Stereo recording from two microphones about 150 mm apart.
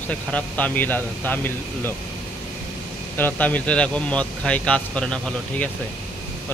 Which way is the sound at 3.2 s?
10° left (ahead or behind).